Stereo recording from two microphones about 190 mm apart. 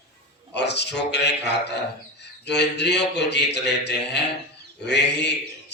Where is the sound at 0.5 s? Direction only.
65° left (ahead or behind).